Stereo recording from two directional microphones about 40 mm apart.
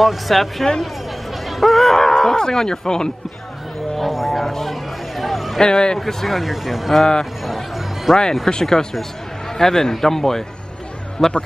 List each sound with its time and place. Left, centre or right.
0.0 s speech: centre
3.9 s music: centre
5.6 s speech: centre
6.2 s speech: centre
7.0 s speech: centre
7.4 s music: centre
8.1 s speech: centre